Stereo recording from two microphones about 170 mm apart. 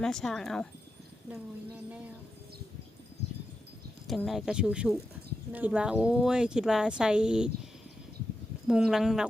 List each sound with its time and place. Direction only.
0.0 s speech: 5° left (ahead or behind)
4.0 s speech: centre (ahead or behind)